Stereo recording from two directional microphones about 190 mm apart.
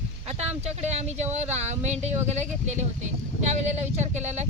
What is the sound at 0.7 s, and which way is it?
Speech, 35° right (ahead or behind).